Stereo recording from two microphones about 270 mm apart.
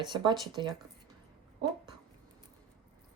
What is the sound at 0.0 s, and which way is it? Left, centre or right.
Speech, centre.